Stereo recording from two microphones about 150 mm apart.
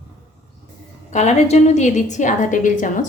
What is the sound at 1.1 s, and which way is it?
A woman's voice, 50° left (ahead or behind).